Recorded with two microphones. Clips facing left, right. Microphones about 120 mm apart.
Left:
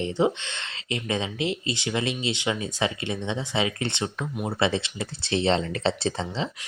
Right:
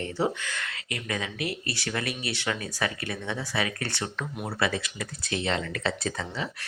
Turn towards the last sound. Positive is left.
turn(degrees=25)  # may be behind; listen again after turning